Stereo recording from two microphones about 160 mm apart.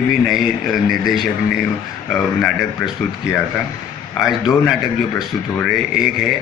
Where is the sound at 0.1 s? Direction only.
Centre (ahead or behind).